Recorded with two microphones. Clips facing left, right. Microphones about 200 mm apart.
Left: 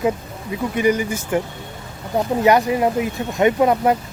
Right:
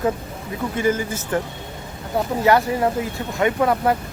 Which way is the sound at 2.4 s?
15° left (ahead or behind).